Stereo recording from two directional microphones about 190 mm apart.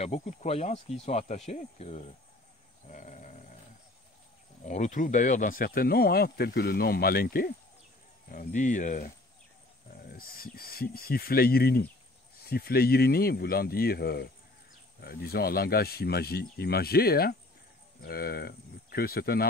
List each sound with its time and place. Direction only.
0.0 s speech: 35° left (ahead or behind)
2.9 s a sound: 40° left (ahead or behind)
4.6 s speech: 40° left (ahead or behind)
10.0 s speech: 50° left (ahead or behind)